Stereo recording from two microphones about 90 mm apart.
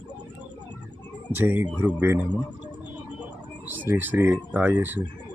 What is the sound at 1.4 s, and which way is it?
Speech, 20° right (ahead or behind).